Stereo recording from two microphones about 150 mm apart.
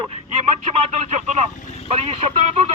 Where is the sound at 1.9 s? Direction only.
40° right (ahead or behind).